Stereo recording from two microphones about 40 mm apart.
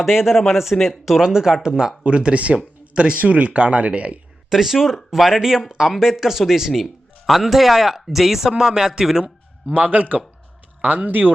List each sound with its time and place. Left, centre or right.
0.0 s speech: centre
1.2 s speech: centre
3.2 s speech: right
4.4 s speech: centre
9.2 s speech: right